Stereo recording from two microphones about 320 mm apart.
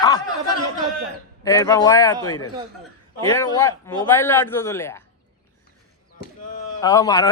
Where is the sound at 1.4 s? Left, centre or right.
Centre.